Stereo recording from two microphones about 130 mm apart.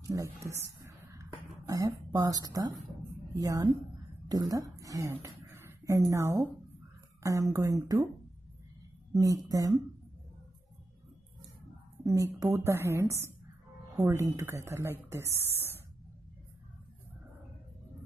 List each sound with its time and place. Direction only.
0.0 s a sound: 25° right (ahead or behind)
1.7 s speech: 30° right (ahead or behind)
7.5 s speech: 25° right (ahead or behind)
9.2 s speech: 25° right (ahead or behind)
12.0 s speech: 25° right (ahead or behind)